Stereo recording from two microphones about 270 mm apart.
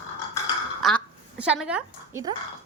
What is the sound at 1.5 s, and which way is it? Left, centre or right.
Speech, centre.